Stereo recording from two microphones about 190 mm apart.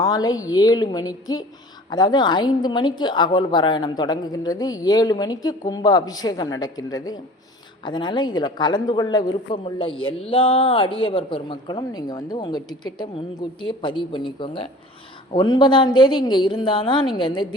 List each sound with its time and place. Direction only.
0.0 s a woman's voice: 20° left (ahead or behind)